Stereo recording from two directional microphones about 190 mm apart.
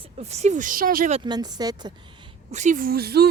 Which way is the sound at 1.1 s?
30° right (ahead or behind).